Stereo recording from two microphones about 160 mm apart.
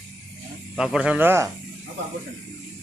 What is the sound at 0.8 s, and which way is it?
Speech, 5° right (ahead or behind).